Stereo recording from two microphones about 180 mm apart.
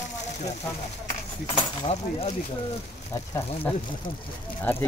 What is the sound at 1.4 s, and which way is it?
Speech, 30° left (ahead or behind).